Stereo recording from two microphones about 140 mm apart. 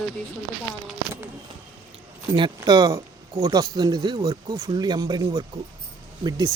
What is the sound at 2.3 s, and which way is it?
Speech, 30° right (ahead or behind).